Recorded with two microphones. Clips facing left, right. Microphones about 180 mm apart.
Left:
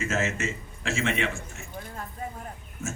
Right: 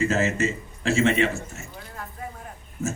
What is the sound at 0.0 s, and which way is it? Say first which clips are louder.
A man's voice: right 6 dB; 35° right (ahead or behind).